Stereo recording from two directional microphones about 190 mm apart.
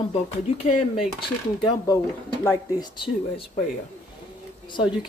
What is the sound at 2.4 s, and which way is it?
Speech, 15° left (ahead or behind).